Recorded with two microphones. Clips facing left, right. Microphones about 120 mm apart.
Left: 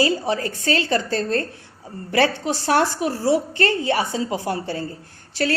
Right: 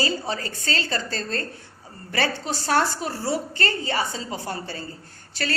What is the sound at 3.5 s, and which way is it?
Speech, 70° left (ahead or behind).